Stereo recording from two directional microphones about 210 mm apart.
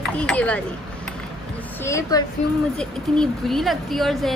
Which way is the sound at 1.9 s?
15° left (ahead or behind).